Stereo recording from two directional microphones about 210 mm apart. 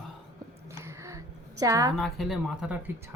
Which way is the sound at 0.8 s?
15° right (ahead or behind).